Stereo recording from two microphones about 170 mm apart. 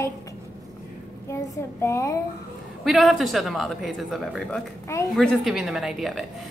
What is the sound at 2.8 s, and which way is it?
A woman's voice, centre (ahead or behind).